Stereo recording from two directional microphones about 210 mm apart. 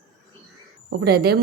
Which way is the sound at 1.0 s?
50° right (ahead or behind).